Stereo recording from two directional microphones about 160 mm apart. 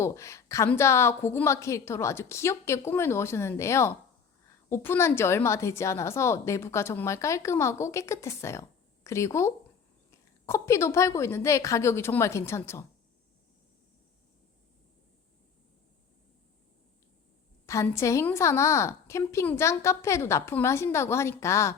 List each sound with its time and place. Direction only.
0.0 s a woman's voice: 20° left (ahead or behind)
17.7 s a woman's voice: 20° left (ahead or behind)